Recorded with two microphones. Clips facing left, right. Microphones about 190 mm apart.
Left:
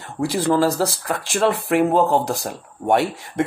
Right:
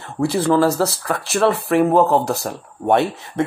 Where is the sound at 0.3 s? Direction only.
15° left (ahead or behind).